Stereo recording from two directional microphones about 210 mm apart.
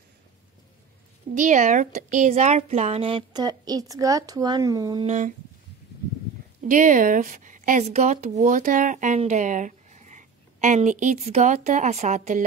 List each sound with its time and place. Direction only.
1.3 s speech: 35° right (ahead or behind); by 5.0 s 20° right (ahead or behind)
5.0 s speech: 35° right (ahead or behind)
6.7 s speech: 35° right (ahead or behind)